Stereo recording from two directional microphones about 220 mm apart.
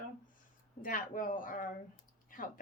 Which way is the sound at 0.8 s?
40° left (ahead or behind).